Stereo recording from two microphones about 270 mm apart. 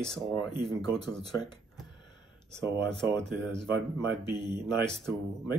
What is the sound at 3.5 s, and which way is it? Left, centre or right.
Speech, right.